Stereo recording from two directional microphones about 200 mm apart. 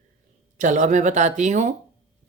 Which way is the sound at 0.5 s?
40° right (ahead or behind).